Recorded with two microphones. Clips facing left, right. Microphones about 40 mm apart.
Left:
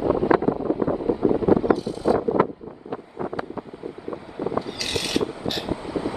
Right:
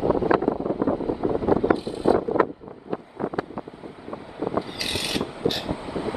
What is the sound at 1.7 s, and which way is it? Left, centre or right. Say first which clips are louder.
Vehicle: right 1 dB; right.